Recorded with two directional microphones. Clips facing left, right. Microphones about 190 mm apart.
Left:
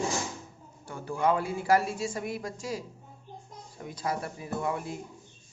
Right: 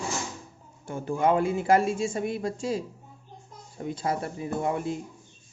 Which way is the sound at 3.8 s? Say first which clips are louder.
Right 4 dB; 25° right (ahead or behind).